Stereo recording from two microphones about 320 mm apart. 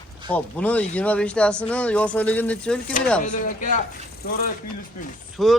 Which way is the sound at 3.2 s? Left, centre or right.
Left.